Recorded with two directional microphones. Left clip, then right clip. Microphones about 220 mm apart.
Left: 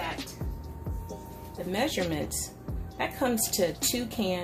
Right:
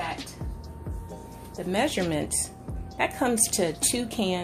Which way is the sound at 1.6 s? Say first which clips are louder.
Right 3 dB; 30° right (ahead or behind).